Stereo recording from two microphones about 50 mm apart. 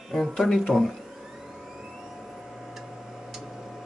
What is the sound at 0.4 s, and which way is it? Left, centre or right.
Speech, centre.